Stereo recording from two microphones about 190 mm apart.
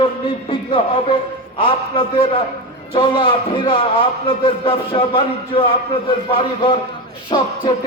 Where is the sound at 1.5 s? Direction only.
30° left (ahead or behind).